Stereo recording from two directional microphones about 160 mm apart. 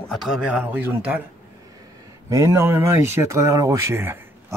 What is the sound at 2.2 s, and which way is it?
Speech, 20° right (ahead or behind).